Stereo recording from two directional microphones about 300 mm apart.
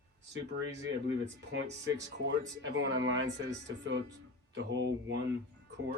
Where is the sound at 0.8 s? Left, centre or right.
Right.